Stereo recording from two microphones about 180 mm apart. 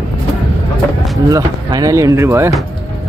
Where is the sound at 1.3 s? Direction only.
20° right (ahead or behind).